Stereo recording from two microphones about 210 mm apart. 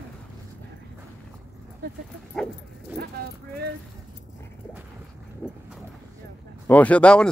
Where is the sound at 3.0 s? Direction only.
45° right (ahead or behind).